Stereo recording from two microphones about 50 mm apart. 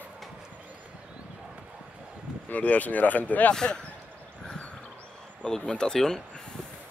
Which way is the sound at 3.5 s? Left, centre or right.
Centre.